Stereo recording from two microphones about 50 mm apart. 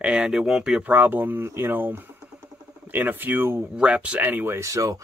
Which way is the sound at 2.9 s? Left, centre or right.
Right.